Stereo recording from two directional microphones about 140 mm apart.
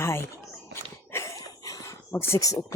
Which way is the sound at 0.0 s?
20° left (ahead or behind).